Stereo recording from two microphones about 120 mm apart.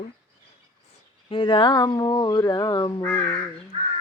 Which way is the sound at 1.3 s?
45° left (ahead or behind).